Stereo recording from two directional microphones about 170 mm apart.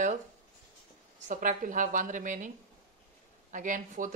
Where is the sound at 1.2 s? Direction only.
50° right (ahead or behind).